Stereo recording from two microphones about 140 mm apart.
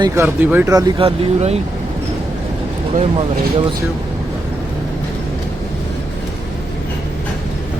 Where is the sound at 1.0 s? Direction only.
45° right (ahead or behind).